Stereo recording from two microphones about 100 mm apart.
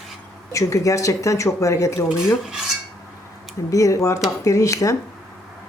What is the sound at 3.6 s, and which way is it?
Speech, 35° left (ahead or behind).